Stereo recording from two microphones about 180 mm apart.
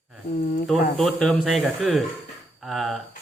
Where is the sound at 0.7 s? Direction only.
Centre (ahead or behind).